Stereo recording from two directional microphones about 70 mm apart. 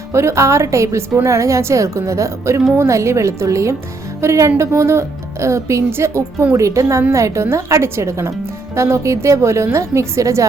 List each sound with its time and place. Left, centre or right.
0.1 s a woman's voice: right